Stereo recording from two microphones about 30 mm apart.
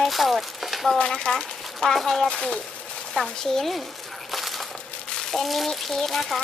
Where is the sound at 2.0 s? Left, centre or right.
Centre.